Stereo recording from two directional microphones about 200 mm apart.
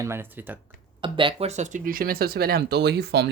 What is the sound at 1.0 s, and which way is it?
Speech, 25° right (ahead or behind).